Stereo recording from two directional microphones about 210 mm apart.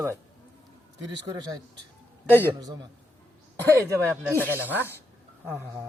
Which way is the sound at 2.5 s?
20° right (ahead or behind).